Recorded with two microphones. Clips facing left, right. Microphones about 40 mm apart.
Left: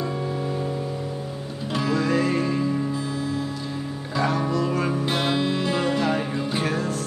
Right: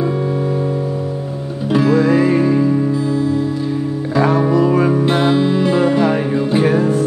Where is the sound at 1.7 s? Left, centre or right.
Centre.